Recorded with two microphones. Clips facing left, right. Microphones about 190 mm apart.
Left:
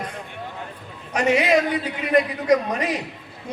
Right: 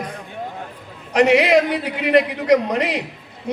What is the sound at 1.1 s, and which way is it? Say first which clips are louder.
A man's voice: right 5 dB; 75° right (ahead or behind).